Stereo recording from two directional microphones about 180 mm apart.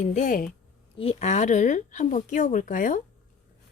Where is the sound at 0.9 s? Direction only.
35° left (ahead or behind).